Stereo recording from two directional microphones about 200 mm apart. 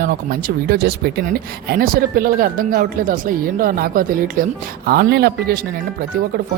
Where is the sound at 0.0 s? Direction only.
45° right (ahead or behind).